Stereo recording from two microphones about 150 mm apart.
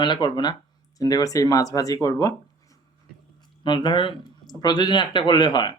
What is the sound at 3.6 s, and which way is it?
Speech, 30° left (ahead or behind).